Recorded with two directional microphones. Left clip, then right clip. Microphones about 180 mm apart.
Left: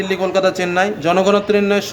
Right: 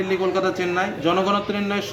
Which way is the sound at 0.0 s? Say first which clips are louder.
Left 5 dB; 20° left (ahead or behind).